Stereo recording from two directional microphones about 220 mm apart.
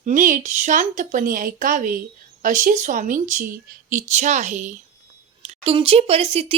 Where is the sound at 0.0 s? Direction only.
35° right (ahead or behind).